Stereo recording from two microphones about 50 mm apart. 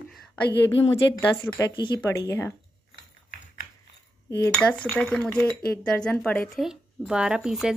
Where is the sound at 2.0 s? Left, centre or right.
Left.